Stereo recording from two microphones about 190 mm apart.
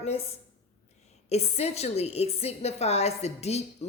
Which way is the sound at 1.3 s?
35° left (ahead or behind).